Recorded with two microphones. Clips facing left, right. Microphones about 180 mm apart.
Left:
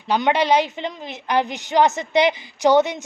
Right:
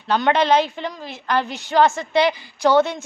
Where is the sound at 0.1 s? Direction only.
10° left (ahead or behind).